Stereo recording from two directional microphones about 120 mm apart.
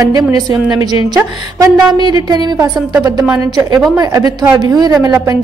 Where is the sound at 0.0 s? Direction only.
30° right (ahead or behind).